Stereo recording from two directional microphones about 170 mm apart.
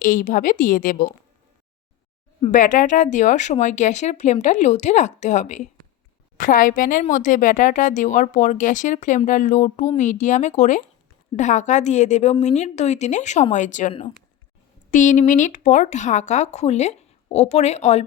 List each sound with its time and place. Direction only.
0.0 s speech: 50° left (ahead or behind)
2.5 s speech: 50° left (ahead or behind)